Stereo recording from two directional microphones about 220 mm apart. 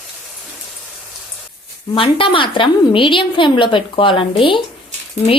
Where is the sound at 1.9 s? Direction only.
25° left (ahead or behind).